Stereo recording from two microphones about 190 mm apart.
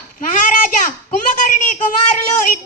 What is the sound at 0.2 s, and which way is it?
A child's voice, 45° left (ahead or behind).